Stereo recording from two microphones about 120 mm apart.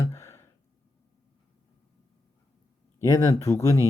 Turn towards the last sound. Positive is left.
turn(degrees=20)  # may be behind; listen again after turning